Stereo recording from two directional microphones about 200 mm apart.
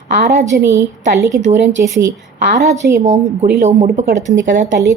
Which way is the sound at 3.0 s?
35° right (ahead or behind).